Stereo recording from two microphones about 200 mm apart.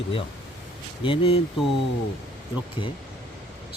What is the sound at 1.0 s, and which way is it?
Speech, 25° left (ahead or behind).